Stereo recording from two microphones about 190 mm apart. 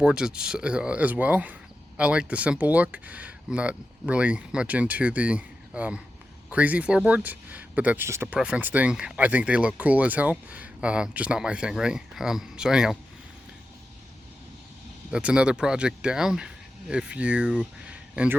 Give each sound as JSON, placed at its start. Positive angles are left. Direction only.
{"t": 0.0, "sound": "speech", "side_deg": -5}
{"t": 15.1, "sound": "speech", "side_deg": -5}